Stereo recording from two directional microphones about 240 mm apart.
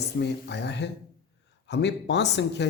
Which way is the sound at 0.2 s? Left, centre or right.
Left.